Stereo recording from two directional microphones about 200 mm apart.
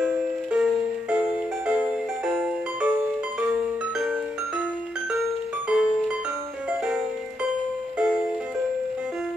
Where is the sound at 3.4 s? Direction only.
5° right (ahead or behind).